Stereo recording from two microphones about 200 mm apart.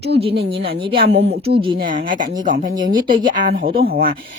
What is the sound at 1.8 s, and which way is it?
Speech, 40° right (ahead or behind).